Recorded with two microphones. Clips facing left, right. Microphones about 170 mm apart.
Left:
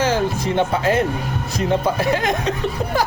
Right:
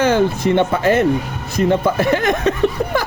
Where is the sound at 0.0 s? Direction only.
60° right (ahead or behind).